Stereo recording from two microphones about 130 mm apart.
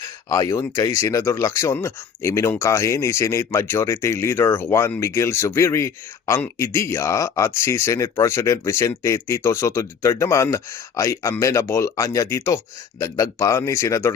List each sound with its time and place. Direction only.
0.0 s speech: 25° left (ahead or behind)